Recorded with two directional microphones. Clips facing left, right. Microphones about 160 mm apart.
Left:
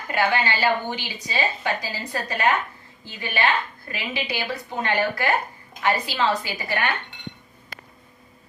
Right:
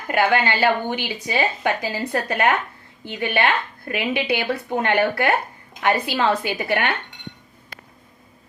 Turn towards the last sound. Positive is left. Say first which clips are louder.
# right 4 dB
turn(degrees=-60)  # may be behind; listen again after turning